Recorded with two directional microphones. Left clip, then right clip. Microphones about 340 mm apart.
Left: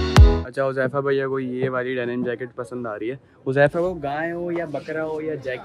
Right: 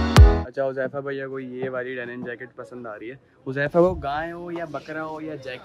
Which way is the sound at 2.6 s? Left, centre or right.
Left.